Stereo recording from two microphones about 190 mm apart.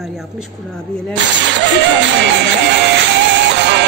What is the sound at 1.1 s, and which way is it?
Music, 70° right (ahead or behind).